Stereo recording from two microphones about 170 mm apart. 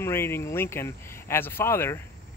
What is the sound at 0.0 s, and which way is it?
Speech, 15° left (ahead or behind).